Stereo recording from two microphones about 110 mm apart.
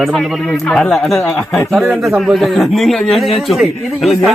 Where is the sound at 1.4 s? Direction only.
20° left (ahead or behind).